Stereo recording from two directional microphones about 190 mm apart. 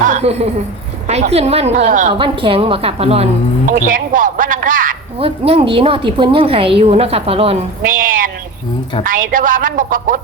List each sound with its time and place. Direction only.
0.1 s a sound: 35° right (ahead or behind)
1.0 s a woman's voice: 35° right (ahead or behind)
2.1 s a woman's voice: 25° right (ahead or behind)
3.7 s speech: 45° right (ahead or behind)
5.2 s a woman's voice: 30° right (ahead or behind)
7.8 s speech: 45° right (ahead or behind)